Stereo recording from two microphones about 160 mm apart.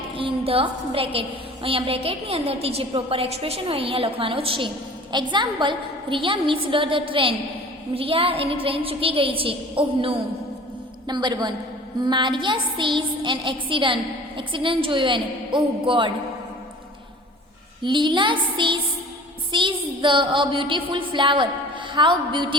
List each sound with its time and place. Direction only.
0.1 s a woman's voice: 35° right (ahead or behind)
17.8 s a woman's voice: 30° right (ahead or behind)